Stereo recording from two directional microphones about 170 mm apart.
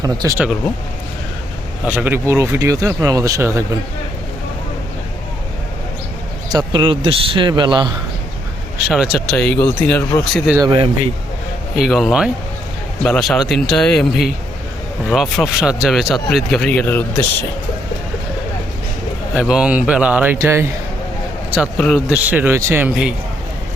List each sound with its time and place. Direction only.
0.0 s speech: 20° right (ahead or behind)
1.9 s speech: 10° right (ahead or behind)
6.5 s speech: 25° right (ahead or behind)
8.9 s speech: centre (ahead or behind)
9.6 s speech: 10° left (ahead or behind)
10.6 s speech: 30° right (ahead or behind)
11.8 s speech: centre (ahead or behind)
19.3 s speech: 5° right (ahead or behind)
21.8 s speech: 5° left (ahead or behind)
22.1 s speech: 10° right (ahead or behind)